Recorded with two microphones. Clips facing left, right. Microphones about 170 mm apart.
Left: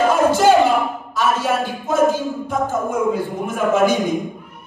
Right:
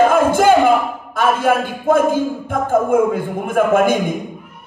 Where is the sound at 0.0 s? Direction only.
55° right (ahead or behind).